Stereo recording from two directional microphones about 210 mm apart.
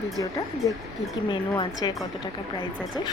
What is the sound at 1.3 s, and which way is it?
Speech, 20° left (ahead or behind).